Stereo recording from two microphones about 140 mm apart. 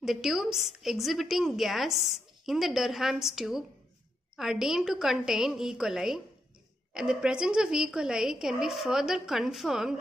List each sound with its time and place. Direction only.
0.0 s a woman's voice: 5° right (ahead or behind)